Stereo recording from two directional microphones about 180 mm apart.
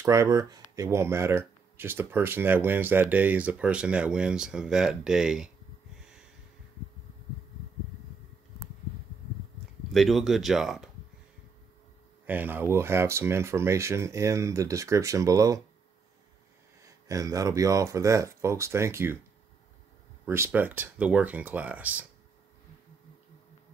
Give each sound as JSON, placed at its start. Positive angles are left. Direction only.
{"t": 0.0, "sound": "speech", "side_deg": -15}
{"t": 5.9, "sound": "a sound", "side_deg": -5}
{"t": 9.9, "sound": "speech", "side_deg": 0}
{"t": 12.3, "sound": "speech", "side_deg": -10}
{"t": 16.8, "sound": "speech", "side_deg": -20}
{"t": 20.2, "sound": "speech", "side_deg": -15}